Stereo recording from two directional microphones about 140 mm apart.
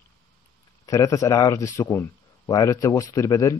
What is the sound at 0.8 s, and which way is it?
A man's voice, 25° left (ahead or behind).